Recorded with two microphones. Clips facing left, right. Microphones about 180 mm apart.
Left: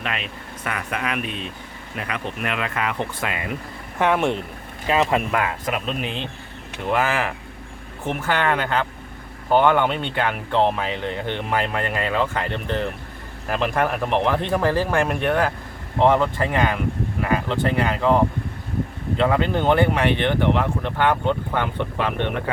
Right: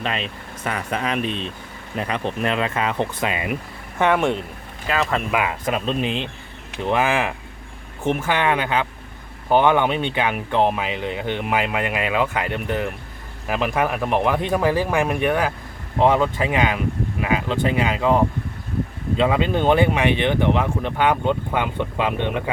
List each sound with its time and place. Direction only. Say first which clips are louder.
0.0 s speech: right 3 dB; 30° right (ahead or behind)
3.9 s speech: right 1 dB; 5° left (ahead or behind)
4.9 s speech: left 3 dB; 20° left (ahead or behind)
5.3 s speech: right 1 dB; 15° right (ahead or behind)